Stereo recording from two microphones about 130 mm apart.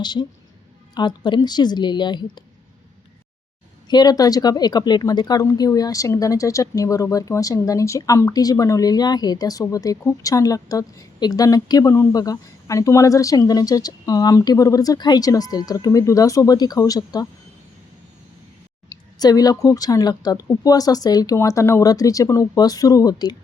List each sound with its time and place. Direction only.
0.0 s a woman's voice: 35° left (ahead or behind)
3.8 s speech: 30° left (ahead or behind)
18.9 s speech: 30° left (ahead or behind)